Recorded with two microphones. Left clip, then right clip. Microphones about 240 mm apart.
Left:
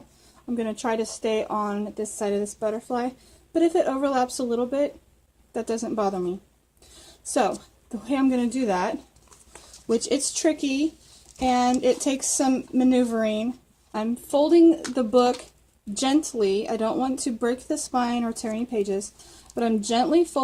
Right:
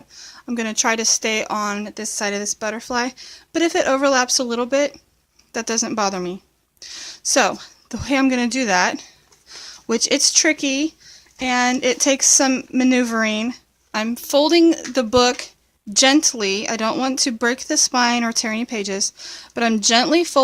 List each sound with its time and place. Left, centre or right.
0.4 s speech: right
7.3 s speech: right